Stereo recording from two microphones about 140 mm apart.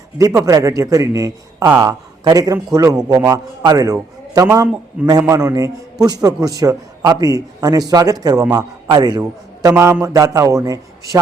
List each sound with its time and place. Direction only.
0.2 s a man's voice: 25° right (ahead or behind)